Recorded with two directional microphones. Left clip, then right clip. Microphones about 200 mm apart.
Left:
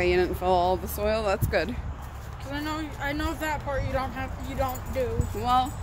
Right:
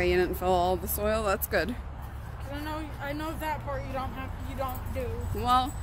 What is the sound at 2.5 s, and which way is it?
Speech, 45° left (ahead or behind).